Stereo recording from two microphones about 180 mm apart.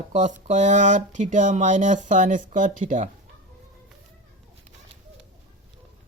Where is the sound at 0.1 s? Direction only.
40° right (ahead or behind).